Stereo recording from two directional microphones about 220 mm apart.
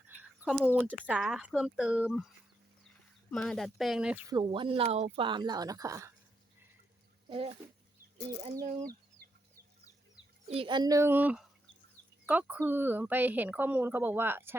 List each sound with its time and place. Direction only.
0.1 s speech: 5° right (ahead or behind)
3.3 s speech: 5° left (ahead or behind)
4.4 s speech: 20° right (ahead or behind)
7.3 s speech: 25° right (ahead or behind)
8.6 s speech: 35° right (ahead or behind)
10.5 s a woman's voice: 25° right (ahead or behind)